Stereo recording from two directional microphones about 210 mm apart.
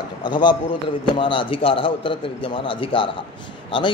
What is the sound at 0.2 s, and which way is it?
A man's voice, 20° left (ahead or behind).